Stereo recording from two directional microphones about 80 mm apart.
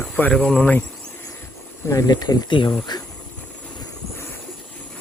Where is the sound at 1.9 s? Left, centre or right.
Left.